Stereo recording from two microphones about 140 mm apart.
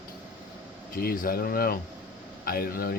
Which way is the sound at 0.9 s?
90° left.